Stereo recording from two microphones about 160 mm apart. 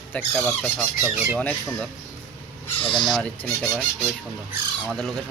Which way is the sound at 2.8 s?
30° left (ahead or behind).